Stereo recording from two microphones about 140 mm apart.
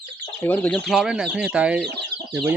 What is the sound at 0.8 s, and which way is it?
Speech, centre (ahead or behind).